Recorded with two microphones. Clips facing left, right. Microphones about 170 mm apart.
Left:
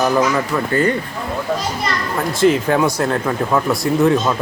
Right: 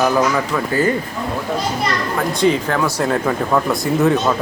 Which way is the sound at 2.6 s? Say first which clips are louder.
Left 3 dB; 20° left (ahead or behind).